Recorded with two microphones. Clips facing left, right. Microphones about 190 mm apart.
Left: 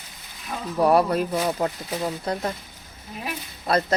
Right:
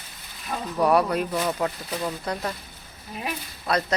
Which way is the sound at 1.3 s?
10° left (ahead or behind).